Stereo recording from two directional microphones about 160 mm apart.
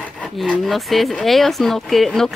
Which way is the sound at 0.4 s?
Centre (ahead or behind).